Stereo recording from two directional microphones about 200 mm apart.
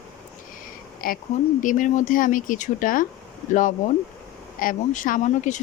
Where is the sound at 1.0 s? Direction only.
45° left (ahead or behind).